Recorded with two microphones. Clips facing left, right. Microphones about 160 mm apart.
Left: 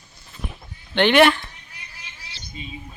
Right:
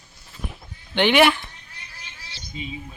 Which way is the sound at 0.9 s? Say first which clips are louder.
Left 2 dB; 10° right (ahead or behind).